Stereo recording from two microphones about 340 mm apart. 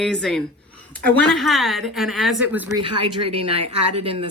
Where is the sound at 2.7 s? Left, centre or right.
Centre.